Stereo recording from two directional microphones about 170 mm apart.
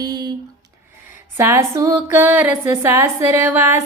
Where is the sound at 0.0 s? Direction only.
25° right (ahead or behind).